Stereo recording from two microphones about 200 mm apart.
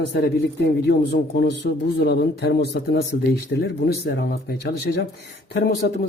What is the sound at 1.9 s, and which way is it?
A man's voice, 55° left (ahead or behind).